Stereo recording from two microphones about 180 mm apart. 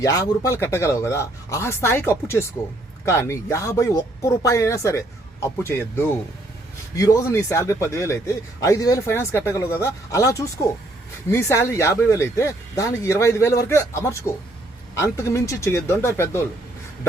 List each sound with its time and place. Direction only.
0.0 s speech: 15° left (ahead or behind)